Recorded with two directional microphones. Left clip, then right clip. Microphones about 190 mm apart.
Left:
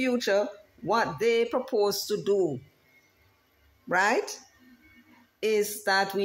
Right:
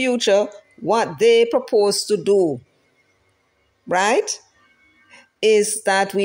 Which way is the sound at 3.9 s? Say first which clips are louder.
Right 7 dB; 40° right (ahead or behind).